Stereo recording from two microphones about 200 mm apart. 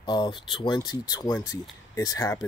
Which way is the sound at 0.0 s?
20° left (ahead or behind).